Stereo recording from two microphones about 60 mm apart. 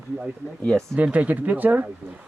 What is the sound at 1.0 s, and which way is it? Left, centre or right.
Speech, right.